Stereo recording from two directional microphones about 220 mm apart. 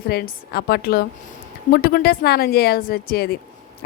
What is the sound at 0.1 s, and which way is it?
Speech, 45° left (ahead or behind).